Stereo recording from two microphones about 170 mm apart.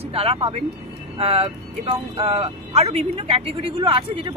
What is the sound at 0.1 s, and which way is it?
Speech, 35° right (ahead or behind).